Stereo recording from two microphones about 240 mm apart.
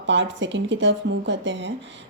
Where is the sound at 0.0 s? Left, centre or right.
Right.